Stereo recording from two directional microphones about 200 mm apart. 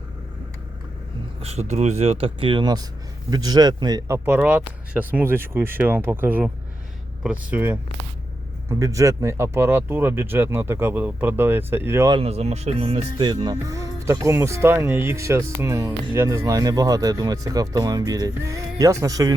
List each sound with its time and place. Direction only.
1.4 s speech: 30° right (ahead or behind); by 12.1 s 10° right (ahead or behind)
12.1 s speech: 30° right (ahead or behind)